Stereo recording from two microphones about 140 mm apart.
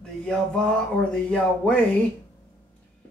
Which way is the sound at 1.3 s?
10° left (ahead or behind).